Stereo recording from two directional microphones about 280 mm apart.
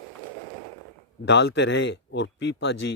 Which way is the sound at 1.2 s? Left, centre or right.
Left.